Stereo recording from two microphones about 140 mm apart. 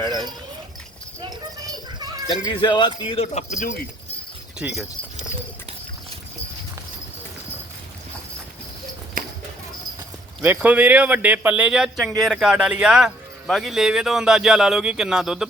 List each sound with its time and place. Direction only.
1.7 s children playing: 25° right (ahead or behind)
2.2 s speech: 30° left (ahead or behind)
3.3 s speech: 60° left (ahead or behind)
4.5 s speech: 5° right (ahead or behind)
10.4 s a man's voice: 10° right (ahead or behind)